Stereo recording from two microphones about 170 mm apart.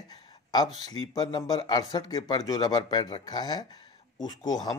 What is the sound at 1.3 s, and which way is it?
Speech, 25° left (ahead or behind).